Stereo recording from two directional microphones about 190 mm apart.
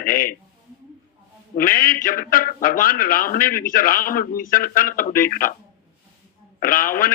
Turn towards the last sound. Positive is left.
turn(degrees=45)  # may be behind; listen again after turning